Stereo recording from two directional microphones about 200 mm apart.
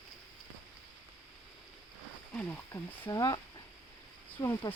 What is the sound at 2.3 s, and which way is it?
Speech, 10° left (ahead or behind).